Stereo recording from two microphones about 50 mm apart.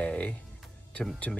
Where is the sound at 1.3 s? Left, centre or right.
Centre.